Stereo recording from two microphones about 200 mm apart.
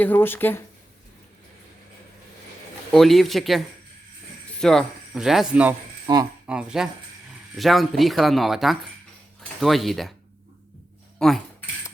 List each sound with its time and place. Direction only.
0.0 s speech: 10° left (ahead or behind)
2.9 s speech: centre (ahead or behind)
4.6 s speech: centre (ahead or behind)
6.1 s speech: 20° right (ahead or behind)
6.5 s speech: 5° right (ahead or behind)
11.2 s a sound: centre (ahead or behind)